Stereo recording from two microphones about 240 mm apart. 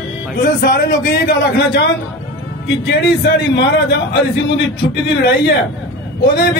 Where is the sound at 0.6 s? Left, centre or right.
Left.